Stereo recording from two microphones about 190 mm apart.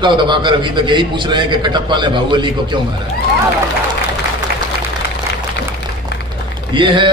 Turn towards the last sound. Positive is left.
turn(degrees=-25)  # may be behind; listen again after turning